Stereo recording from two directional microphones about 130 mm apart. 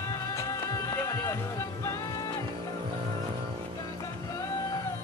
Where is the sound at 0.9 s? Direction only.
20° left (ahead or behind).